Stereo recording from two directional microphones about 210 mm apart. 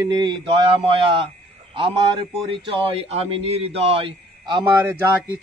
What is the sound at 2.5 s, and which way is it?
Speech, 25° right (ahead or behind).